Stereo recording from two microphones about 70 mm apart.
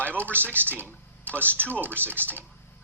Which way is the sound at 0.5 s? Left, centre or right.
Right.